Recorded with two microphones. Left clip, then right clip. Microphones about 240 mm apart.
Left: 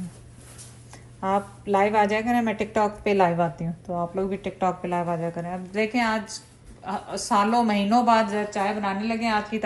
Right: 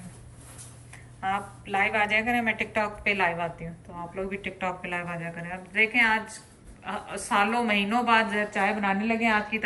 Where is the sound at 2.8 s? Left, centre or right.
Centre.